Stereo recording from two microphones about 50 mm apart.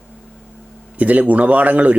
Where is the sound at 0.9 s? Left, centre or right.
Right.